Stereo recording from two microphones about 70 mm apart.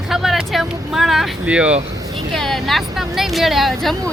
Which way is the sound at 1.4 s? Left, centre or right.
Centre.